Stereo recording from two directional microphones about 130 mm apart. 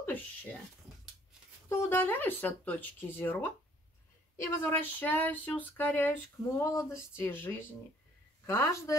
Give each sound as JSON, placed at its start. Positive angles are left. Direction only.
{"t": 0.0, "sound": "speech", "side_deg": 15}
{"t": 1.7, "sound": "speech", "side_deg": 15}